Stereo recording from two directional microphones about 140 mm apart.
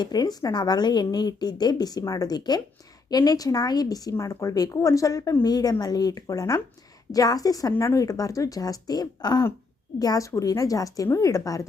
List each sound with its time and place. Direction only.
0.0 s speech: 30° left (ahead or behind)